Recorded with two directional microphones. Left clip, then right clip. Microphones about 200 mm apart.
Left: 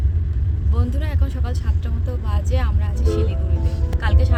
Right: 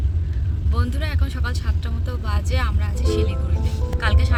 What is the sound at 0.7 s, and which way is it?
Speech, 10° left (ahead or behind).